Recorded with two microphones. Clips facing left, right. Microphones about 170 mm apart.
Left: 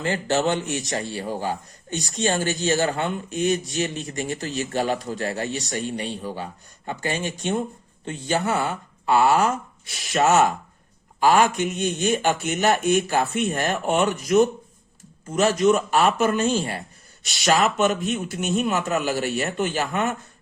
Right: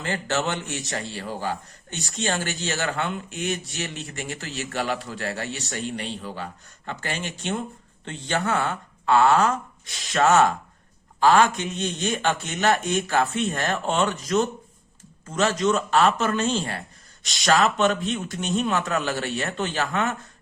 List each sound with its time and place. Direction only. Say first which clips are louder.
0.0 s a man's voice: left 4 dB; 15° left (ahead or behind)
11.2 s a man's voice: even; 10° left (ahead or behind)